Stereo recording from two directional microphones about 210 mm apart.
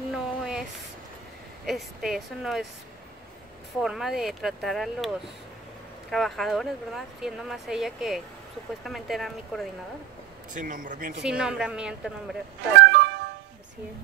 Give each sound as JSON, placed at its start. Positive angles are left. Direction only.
{"t": 0.1, "sound": "a sound", "side_deg": -5}
{"t": 1.7, "sound": "speech", "side_deg": 0}
{"t": 3.8, "sound": "speech", "side_deg": 0}
{"t": 10.5, "sound": "speech", "side_deg": -40}
{"t": 11.2, "sound": "speech", "side_deg": -5}
{"t": 12.9, "sound": "music", "side_deg": -55}